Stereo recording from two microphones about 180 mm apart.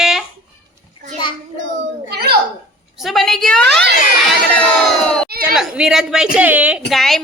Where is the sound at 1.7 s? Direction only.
60° right (ahead or behind).